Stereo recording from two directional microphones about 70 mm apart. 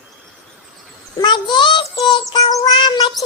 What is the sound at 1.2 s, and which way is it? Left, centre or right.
Speech, left.